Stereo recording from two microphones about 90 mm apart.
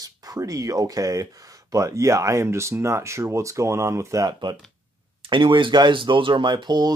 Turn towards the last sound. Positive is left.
turn(degrees=-50)  # may be behind; listen again after turning